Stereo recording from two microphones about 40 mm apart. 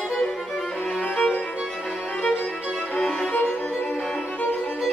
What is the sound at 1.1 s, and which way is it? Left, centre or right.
Music, left.